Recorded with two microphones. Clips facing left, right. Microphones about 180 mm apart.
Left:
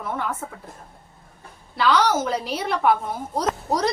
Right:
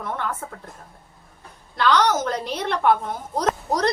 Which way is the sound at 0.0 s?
5° left (ahead or behind).